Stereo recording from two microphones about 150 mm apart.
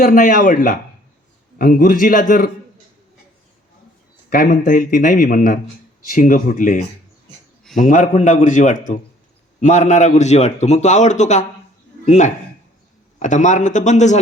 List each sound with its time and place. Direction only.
0.0 s a man's voice: 70° left (ahead or behind)
4.3 s a man's voice: 70° left (ahead or behind); by 14.2 s 50° left (ahead or behind)